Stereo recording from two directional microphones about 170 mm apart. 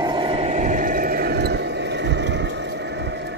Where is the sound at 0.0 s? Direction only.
25° right (ahead or behind); by 3.2 s 90° right.